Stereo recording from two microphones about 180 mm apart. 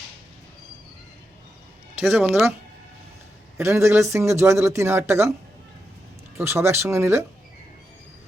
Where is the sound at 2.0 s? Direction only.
Centre (ahead or behind).